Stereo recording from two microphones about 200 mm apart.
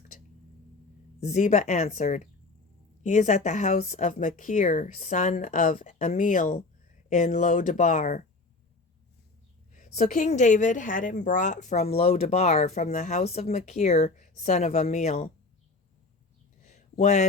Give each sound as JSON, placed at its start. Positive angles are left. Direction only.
{"t": 1.2, "sound": "a woman's voice", "side_deg": 35}
{"t": 9.7, "sound": "a woman's voice", "side_deg": 35}
{"t": 16.6, "sound": "a sound", "side_deg": 35}